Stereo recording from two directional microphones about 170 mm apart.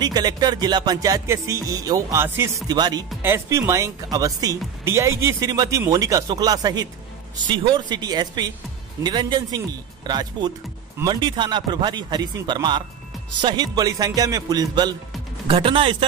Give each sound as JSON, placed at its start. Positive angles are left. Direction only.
{"t": 0.0, "sound": "speech", "side_deg": -25}